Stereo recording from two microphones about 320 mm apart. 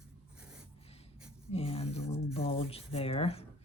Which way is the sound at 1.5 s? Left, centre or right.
Centre.